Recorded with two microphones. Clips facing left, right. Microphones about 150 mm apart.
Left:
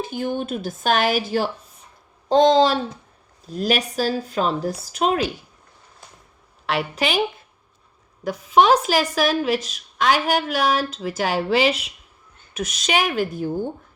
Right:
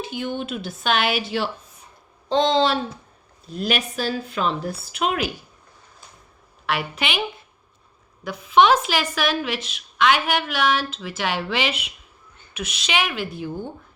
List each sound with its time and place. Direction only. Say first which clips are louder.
0.0 s speech: left 3 dB; 45° left (ahead or behind)
6.7 s speech: left 3 dB; 35° left (ahead or behind)
8.2 s speech: even; 40° left (ahead or behind)